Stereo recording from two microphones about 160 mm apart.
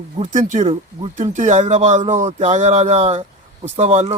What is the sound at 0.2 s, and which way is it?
Speech, 50° right (ahead or behind).